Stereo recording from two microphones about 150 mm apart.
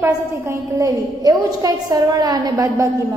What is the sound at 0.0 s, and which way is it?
A woman's voice, 20° right (ahead or behind).